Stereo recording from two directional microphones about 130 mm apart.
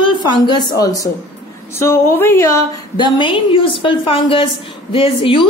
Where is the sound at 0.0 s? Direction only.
35° left (ahead or behind).